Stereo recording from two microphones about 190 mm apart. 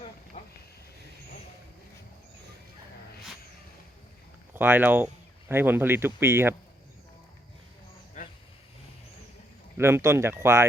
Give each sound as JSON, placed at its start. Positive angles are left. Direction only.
{"t": 0.4, "sound": "a sound", "side_deg": 40}
{"t": 4.5, "sound": "speech", "side_deg": -10}
{"t": 9.7, "sound": "speech", "side_deg": -15}